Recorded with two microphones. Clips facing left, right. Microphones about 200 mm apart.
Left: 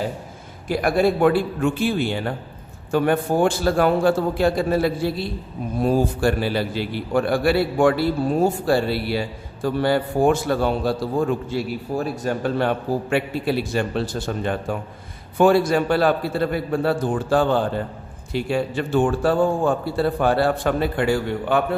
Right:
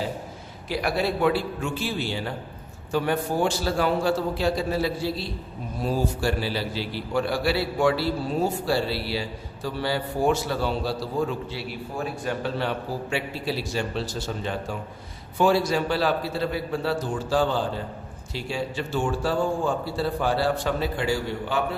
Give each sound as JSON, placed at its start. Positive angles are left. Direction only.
{"t": 0.7, "sound": "a man's voice", "side_deg": 50}